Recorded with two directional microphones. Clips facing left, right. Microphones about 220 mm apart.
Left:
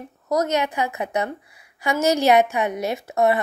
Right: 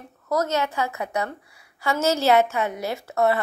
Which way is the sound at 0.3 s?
15° left (ahead or behind).